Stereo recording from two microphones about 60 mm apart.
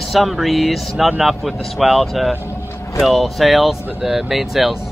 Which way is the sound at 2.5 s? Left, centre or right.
Left.